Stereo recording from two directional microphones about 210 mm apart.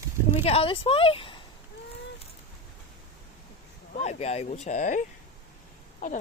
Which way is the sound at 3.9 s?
30° left (ahead or behind).